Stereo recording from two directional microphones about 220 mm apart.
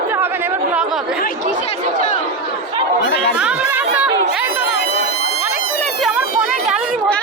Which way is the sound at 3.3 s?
5° right (ahead or behind).